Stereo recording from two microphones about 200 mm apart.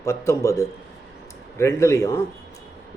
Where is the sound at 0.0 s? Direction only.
15° left (ahead or behind).